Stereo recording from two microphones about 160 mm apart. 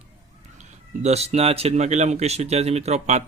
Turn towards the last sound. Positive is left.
turn(degrees=-45)  # may be behind; listen again after turning